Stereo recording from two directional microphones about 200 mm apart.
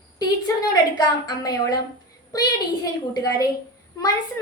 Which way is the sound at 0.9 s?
20° left (ahead or behind).